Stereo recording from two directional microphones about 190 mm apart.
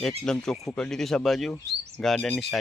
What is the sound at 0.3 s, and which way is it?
Speech, 5° left (ahead or behind).